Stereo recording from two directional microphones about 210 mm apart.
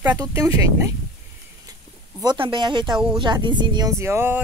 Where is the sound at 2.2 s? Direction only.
20° right (ahead or behind).